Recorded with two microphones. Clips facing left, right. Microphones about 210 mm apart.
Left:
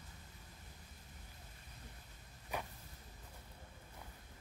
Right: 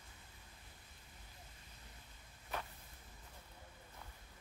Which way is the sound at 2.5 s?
15° left (ahead or behind).